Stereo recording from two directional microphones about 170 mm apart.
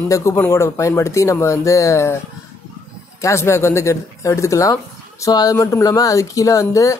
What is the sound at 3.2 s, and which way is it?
Speech, 15° left (ahead or behind).